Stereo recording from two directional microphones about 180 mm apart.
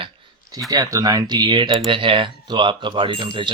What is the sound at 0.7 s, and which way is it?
Speech, 20° right (ahead or behind).